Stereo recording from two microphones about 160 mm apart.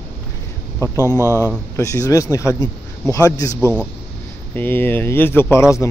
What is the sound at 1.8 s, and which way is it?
Speech, 20° left (ahead or behind).